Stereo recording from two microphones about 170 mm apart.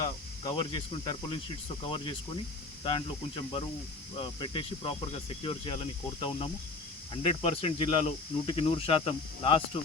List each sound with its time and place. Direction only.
0.4 s speech: 30° left (ahead or behind)